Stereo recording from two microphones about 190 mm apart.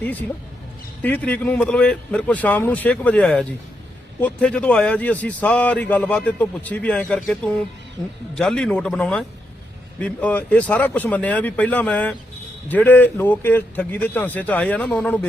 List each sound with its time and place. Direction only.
0.0 s a man's voice: 10° left (ahead or behind)
8.0 s speech: 25° left (ahead or behind)
8.4 s a man's voice: 5° left (ahead or behind)